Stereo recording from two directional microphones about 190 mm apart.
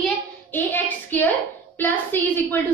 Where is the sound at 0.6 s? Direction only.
10° left (ahead or behind).